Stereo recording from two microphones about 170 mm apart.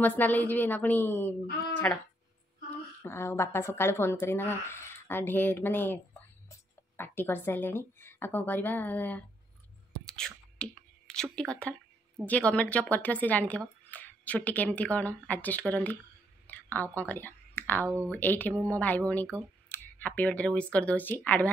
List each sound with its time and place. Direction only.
0.0 s speech: 10° left (ahead or behind)
10.0 s whispering: 5° left (ahead or behind)
12.3 s speech: 5° left (ahead or behind)
16.4 s a sound: 10° left (ahead or behind)
17.8 s speech: 15° right (ahead or behind)
18.1 s speech: 10° left (ahead or behind)
18.5 s speech: 15° right (ahead or behind)
18.8 s speech: 10° left (ahead or behind)